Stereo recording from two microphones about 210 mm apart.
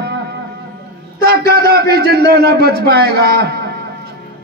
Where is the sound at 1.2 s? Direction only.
45° right (ahead or behind).